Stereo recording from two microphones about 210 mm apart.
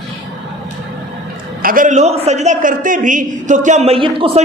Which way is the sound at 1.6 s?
40° right (ahead or behind).